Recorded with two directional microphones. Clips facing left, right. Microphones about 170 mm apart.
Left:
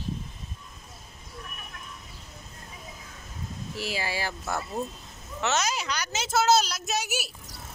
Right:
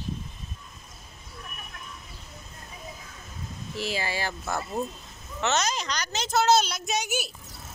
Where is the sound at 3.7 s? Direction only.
10° left (ahead or behind).